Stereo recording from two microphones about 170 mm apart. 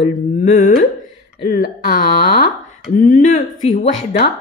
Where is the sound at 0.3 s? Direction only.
50° left (ahead or behind).